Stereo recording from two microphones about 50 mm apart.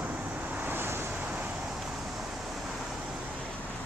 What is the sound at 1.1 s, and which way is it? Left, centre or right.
Vehicle, right.